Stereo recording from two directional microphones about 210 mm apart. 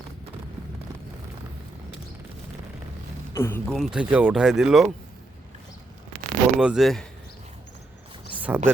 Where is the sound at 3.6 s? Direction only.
Centre (ahead or behind).